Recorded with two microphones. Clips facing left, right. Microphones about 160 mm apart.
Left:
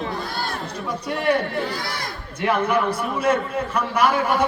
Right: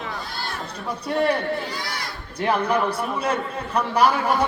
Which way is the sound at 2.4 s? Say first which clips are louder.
Left 1 dB; 35° right (ahead or behind).